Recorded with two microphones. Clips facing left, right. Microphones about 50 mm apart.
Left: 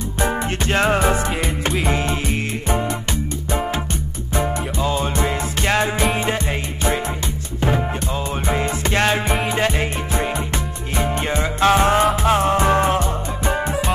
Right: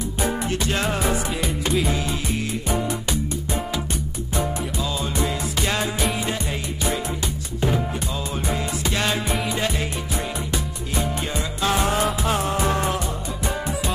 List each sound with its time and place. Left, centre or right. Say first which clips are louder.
0.2 s music: left 3 dB; left
8.5 s music: left 5 dB; left